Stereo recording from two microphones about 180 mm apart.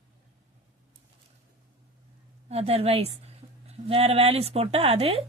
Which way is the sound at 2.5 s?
35° right (ahead or behind).